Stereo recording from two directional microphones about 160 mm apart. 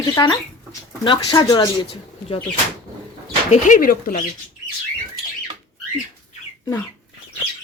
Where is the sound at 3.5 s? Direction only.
50° left (ahead or behind).